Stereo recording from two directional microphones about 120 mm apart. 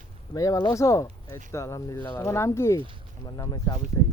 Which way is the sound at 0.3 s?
30° left (ahead or behind).